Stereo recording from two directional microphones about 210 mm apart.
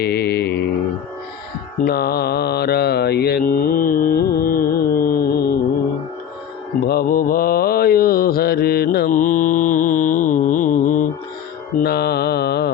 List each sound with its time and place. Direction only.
0.0 s mantra: 50° left (ahead or behind)
1.8 s mantra: 45° left (ahead or behind)
4.4 s music: 45° left (ahead or behind)
6.8 s mantra: 45° left (ahead or behind)
11.8 s mantra: 50° left (ahead or behind)